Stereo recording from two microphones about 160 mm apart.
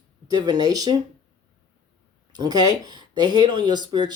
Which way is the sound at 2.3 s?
25° right (ahead or behind).